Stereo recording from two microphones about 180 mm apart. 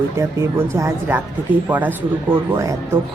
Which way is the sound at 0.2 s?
15° right (ahead or behind).